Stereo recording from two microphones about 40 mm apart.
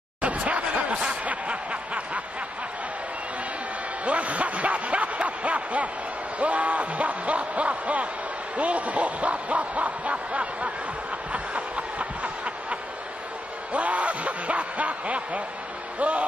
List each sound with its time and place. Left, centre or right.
0.2 s a sound: right
1.2 s snicker: right
4.0 s a sound: right
11.3 s train: right
13.7 s snicker: right
16.0 s music: right